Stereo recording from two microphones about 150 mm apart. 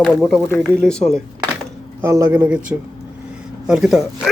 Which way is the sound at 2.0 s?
20° right (ahead or behind).